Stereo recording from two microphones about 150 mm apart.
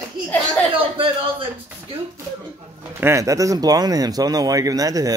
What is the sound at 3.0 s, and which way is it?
Speech, 20° right (ahead or behind).